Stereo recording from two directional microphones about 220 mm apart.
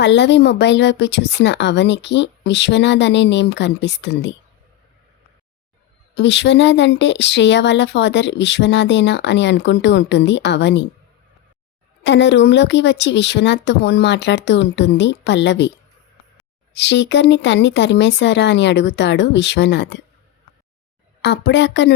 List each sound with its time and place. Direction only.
0.0 s speech: 55° left (ahead or behind)
6.1 s speech: 50° left (ahead or behind)
12.0 s speech: 55° left (ahead or behind)
16.7 s speech: 50° left (ahead or behind)
21.2 s speech: 50° left (ahead or behind)